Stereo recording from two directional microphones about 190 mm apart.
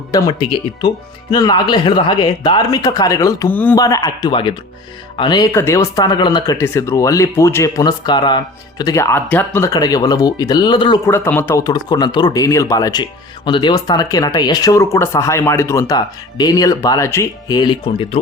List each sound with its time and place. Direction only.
0.1 s speech: 25° left (ahead or behind)